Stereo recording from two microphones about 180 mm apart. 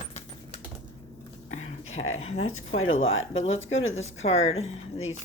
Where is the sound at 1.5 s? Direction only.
40° left (ahead or behind).